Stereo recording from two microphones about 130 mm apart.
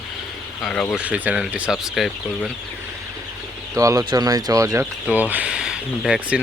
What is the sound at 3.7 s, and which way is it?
Speech, 25° right (ahead or behind).